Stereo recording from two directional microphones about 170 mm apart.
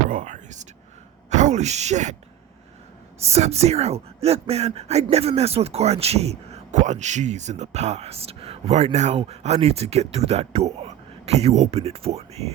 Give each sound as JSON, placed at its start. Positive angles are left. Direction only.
{"t": 0.1, "sound": "speech", "side_deg": -50}
{"t": 3.2, "sound": "speech", "side_deg": -40}